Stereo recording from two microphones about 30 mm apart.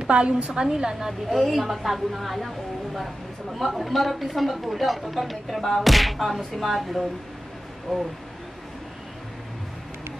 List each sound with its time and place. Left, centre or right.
0.0 s a woman's voice: right
0.5 s a woman's voice: right
1.3 s speech: centre
3.5 s speech: centre
7.9 s speech: centre